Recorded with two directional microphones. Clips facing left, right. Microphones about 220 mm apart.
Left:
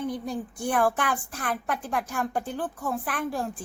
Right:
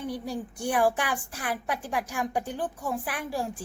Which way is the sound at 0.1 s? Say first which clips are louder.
Left 1 dB; 10° right (ahead or behind).